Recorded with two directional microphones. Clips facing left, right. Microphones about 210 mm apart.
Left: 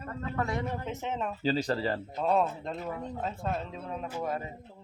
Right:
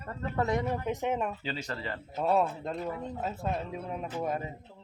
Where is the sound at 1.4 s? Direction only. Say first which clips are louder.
Left 8 dB; 35° left (ahead or behind).